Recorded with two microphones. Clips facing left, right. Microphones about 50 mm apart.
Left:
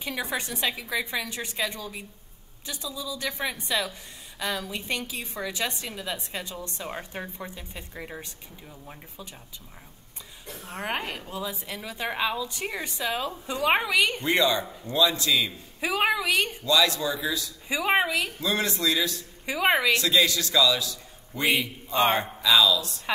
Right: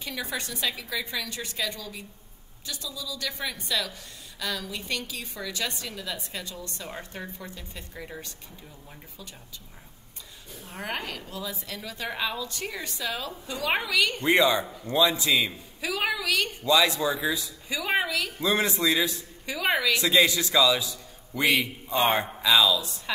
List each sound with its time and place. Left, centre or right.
0.0 s a woman's voice: centre
10.7 s a woman's voice: centre
14.2 s a man's voice: centre
15.8 s a woman's voice: left
16.6 s a man's voice: right
17.6 s a woman's voice: centre
18.4 s a man's voice: centre
19.4 s a woman's voice: left
20.0 s a man's voice: centre